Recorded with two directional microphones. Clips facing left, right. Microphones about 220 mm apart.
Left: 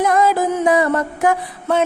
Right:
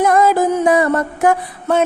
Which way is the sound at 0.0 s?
50° right (ahead or behind).